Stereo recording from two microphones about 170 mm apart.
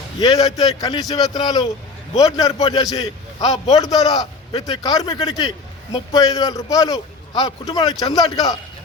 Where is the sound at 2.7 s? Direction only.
20° left (ahead or behind).